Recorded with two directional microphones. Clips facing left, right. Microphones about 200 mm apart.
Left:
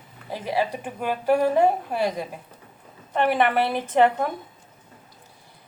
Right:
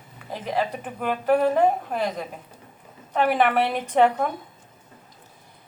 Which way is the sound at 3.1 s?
Centre (ahead or behind).